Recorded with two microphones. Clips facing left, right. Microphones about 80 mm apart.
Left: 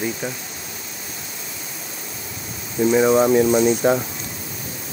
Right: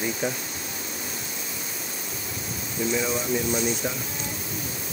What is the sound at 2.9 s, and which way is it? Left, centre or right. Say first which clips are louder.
Speech: left 12 dB; left.